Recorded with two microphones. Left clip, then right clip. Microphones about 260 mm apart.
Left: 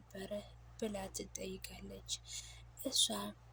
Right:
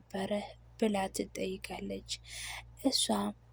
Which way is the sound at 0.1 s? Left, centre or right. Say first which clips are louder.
Right 9 dB; right.